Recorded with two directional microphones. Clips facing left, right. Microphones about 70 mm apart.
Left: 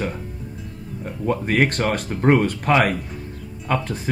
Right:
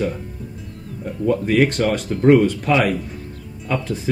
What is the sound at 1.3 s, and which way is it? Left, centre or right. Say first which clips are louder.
Speech: right 3 dB; left.